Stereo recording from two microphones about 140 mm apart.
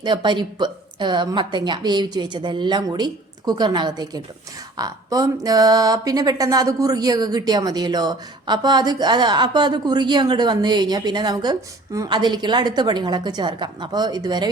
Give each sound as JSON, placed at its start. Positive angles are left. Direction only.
{"t": 0.0, "sound": "a woman's voice", "side_deg": -35}